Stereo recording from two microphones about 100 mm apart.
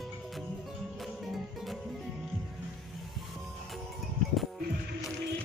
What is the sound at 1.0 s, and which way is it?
Music, centre (ahead or behind).